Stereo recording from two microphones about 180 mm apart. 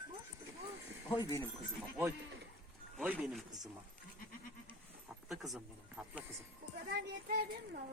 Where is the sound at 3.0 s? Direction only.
5° right (ahead or behind).